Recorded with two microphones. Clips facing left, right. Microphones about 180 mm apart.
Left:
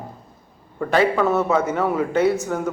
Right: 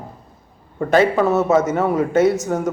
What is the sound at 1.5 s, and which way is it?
Speech, 40° right (ahead or behind).